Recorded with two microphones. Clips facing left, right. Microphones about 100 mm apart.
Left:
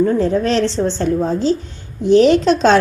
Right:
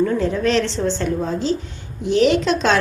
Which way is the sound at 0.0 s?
35° left (ahead or behind).